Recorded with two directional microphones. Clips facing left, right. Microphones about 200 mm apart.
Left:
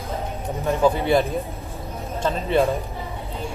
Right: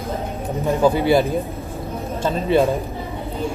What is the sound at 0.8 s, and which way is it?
Speech, 5° right (ahead or behind).